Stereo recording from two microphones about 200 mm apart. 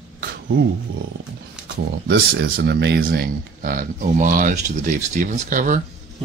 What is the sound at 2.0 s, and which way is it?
Speech, 55° right (ahead or behind).